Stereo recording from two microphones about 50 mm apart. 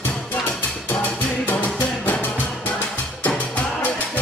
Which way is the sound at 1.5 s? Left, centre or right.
Left.